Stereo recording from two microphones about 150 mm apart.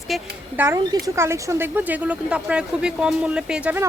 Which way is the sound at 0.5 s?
15° right (ahead or behind).